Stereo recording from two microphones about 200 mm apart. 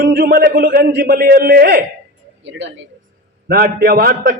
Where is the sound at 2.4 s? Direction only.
65° right (ahead or behind).